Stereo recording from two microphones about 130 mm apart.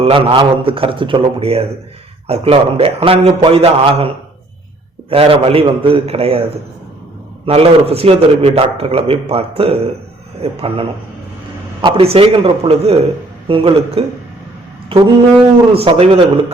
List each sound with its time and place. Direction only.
0.0 s a man's voice: 45° right (ahead or behind)
7.4 s a man's voice: 45° right (ahead or behind)